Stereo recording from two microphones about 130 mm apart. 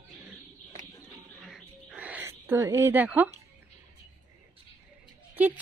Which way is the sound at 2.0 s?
10° right (ahead or behind).